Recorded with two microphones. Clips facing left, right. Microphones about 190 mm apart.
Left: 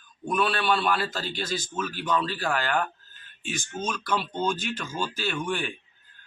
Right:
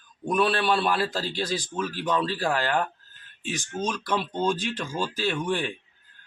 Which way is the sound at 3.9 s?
30° right (ahead or behind).